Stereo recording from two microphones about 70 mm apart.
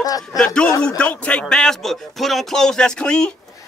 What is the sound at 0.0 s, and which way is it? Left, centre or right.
Speech, left.